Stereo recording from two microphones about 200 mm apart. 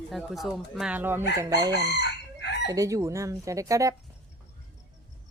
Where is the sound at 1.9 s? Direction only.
60° left (ahead or behind).